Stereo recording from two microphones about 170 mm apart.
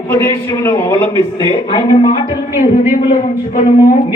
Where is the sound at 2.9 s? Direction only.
50° left (ahead or behind).